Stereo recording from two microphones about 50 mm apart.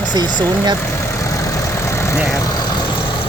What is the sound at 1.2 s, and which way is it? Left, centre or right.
Vehicle, left.